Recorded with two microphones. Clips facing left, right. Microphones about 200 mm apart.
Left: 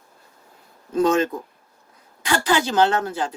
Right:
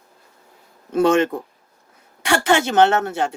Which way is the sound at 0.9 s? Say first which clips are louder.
Right 3 dB; 70° right (ahead or behind).